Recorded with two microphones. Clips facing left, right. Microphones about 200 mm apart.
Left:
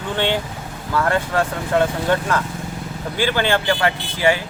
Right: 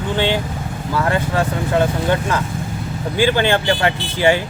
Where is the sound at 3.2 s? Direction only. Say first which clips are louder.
Right 3 dB; 15° right (ahead or behind).